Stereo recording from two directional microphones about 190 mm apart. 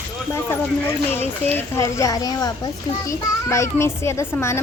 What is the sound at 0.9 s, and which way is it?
A child's voice, 10° left (ahead or behind).